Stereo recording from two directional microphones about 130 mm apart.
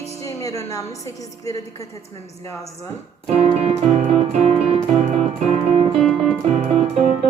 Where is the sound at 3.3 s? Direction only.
55° right (ahead or behind).